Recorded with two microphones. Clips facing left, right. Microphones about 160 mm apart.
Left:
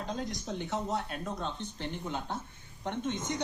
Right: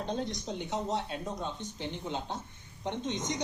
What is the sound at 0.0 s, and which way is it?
Speech, 30° right (ahead or behind).